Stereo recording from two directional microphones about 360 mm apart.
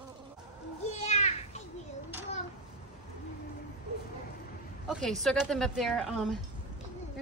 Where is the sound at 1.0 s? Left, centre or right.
Centre.